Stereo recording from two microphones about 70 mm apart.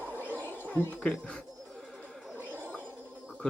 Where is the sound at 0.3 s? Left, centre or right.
Right.